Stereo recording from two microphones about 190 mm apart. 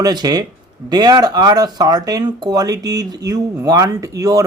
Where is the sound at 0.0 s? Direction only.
20° right (ahead or behind).